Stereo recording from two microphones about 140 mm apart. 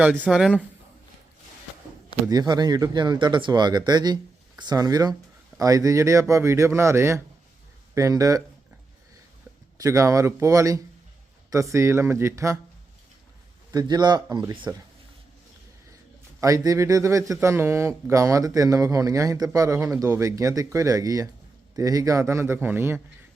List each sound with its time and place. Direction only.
0.0 s speech: 5° right (ahead or behind)
2.3 s speech: 30° right (ahead or behind)
9.7 s speech: 25° right (ahead or behind)
13.7 s speech: 30° right (ahead or behind)
16.4 s speech: 20° right (ahead or behind)